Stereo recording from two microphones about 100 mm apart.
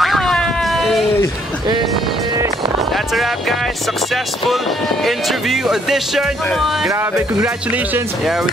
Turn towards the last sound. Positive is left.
turn(degrees=-5)  # may be behind; listen again after turning